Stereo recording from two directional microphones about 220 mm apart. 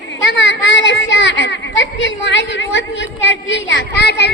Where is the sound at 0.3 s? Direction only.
55° left (ahead or behind).